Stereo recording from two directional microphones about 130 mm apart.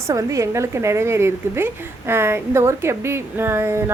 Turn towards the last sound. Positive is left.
turn(degrees=-20)  # may be behind; listen again after turning